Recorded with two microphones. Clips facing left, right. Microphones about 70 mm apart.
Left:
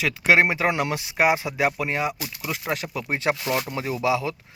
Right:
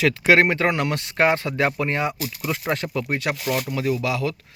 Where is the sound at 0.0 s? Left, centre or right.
Centre.